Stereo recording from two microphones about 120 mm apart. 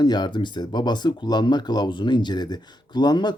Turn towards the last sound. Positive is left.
turn(degrees=35)  # may be behind; listen again after turning